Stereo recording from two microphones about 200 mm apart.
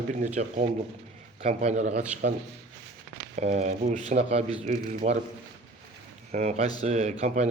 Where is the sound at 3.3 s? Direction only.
35° right (ahead or behind).